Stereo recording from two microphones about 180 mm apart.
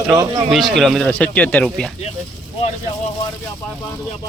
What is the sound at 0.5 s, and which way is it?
Speech, centre (ahead or behind).